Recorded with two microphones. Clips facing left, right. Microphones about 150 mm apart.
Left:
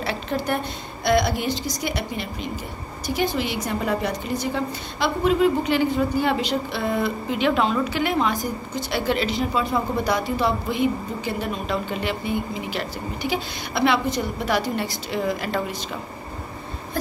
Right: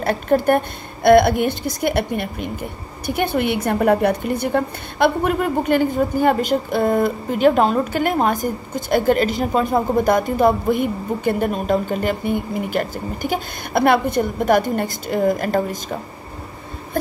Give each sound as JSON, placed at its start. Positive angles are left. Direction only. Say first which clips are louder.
{"t": 0.0, "sound": "a woman's voice", "louder": "right 9 dB", "side_deg": -50}